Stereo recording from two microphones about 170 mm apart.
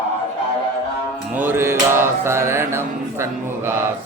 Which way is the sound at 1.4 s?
15° right (ahead or behind).